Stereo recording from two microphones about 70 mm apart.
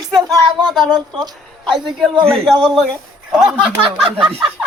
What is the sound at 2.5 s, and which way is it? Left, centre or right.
A man's voice, centre.